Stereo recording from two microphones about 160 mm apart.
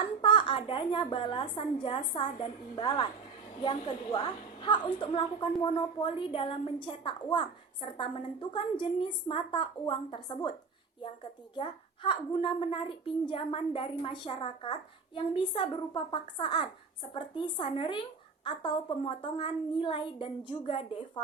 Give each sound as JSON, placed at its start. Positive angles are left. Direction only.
{"t": 0.0, "sound": "a woman's voice", "side_deg": 30}
{"t": 11.5, "sound": "a woman's voice", "side_deg": 30}